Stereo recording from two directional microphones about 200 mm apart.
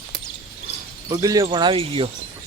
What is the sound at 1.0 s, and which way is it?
Speech, 15° right (ahead or behind).